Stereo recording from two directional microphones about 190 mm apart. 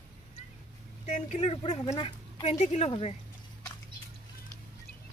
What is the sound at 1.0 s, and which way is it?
Speech, 35° left (ahead or behind).